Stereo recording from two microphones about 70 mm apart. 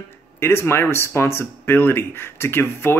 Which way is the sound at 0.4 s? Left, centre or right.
Left.